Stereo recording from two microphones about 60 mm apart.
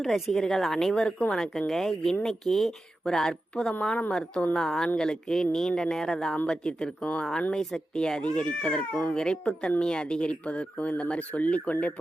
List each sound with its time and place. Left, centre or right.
0.0 s a woman's voice: centre
3.8 s speech: left
4.1 s speech: centre
6.3 s speech: centre